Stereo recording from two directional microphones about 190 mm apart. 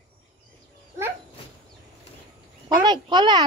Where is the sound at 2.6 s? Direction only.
25° right (ahead or behind).